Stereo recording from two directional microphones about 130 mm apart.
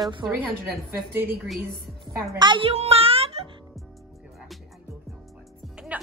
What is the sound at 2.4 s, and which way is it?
A child's voice, 40° right (ahead or behind).